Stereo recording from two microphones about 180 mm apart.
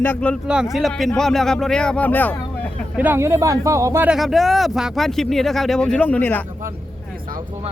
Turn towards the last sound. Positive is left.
turn(degrees=10)  # may be behind; listen again after turning